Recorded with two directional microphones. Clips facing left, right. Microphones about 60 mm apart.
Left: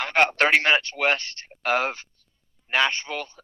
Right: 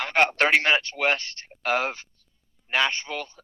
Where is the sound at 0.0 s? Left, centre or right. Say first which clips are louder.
Left 1 dB; left.